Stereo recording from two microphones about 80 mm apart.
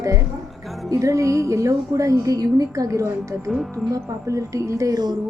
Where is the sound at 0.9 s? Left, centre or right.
Right.